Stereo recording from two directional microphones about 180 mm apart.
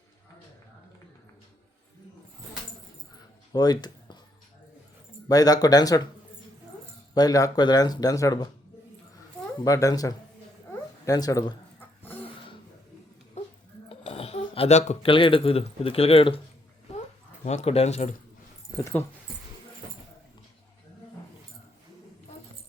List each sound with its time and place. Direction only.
3.5 s a sound: 20° left (ahead or behind)
5.3 s speech: 20° left (ahead or behind)
7.1 s speech: 20° left (ahead or behind)
9.6 s speech: 20° left (ahead or behind)
13.9 s speech: 35° left (ahead or behind)
17.4 s speech: 40° left (ahead or behind)